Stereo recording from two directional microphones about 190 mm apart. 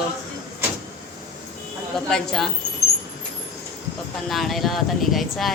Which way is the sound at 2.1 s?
Centre (ahead or behind).